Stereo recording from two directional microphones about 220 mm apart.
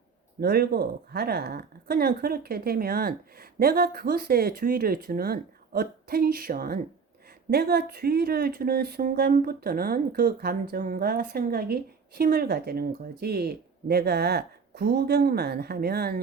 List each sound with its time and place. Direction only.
0.3 s speech: 45° right (ahead or behind)